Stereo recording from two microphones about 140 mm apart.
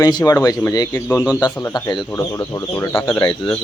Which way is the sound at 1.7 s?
30° left (ahead or behind).